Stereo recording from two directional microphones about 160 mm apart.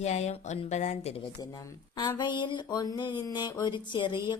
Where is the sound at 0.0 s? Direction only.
45° left (ahead or behind).